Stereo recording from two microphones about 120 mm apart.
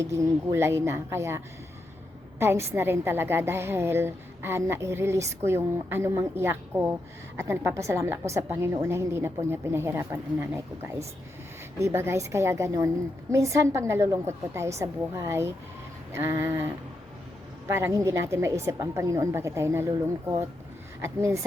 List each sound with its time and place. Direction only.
0.0 s a woman's voice: 25° right (ahead or behind)
2.4 s a woman's voice: 20° right (ahead or behind)
11.8 s a woman's voice: 20° right (ahead or behind)
17.7 s a woman's voice: 20° right (ahead or behind)